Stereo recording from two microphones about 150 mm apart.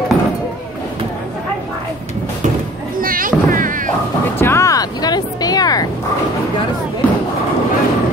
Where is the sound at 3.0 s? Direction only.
70° right (ahead or behind).